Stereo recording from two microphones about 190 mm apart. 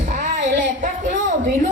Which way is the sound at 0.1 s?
40° right (ahead or behind).